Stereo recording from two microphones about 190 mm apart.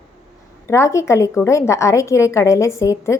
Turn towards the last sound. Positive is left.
turn(degrees=15)  # may be behind; listen again after turning